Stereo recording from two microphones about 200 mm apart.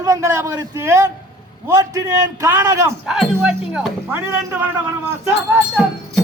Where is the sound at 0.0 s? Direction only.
15° right (ahead or behind).